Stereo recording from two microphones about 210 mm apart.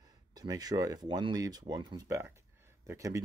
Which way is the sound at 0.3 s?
20° right (ahead or behind).